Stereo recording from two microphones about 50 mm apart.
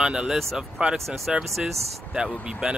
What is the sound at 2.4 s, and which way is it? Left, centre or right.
Speech, centre.